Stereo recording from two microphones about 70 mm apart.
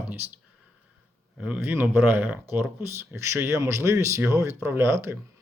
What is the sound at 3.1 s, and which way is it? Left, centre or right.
Speech, right.